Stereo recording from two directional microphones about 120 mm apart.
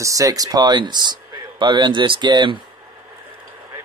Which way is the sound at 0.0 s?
30° right (ahead or behind).